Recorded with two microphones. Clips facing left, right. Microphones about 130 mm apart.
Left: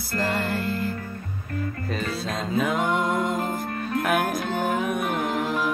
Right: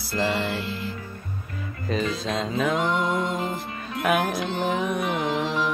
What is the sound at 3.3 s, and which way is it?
Music, 45° left (ahead or behind).